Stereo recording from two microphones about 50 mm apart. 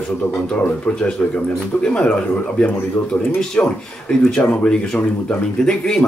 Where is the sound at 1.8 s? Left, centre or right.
Left.